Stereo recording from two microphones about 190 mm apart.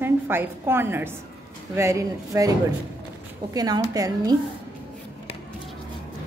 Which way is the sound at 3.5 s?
20° right (ahead or behind).